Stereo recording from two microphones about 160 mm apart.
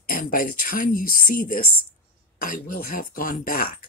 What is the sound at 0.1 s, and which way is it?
Speech, 60° left (ahead or behind).